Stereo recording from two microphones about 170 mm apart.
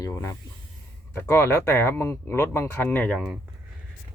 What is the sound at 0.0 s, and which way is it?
Speech, 15° left (ahead or behind).